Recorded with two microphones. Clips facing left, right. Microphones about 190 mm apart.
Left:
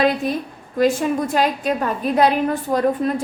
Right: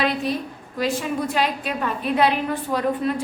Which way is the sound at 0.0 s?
50° left (ahead or behind).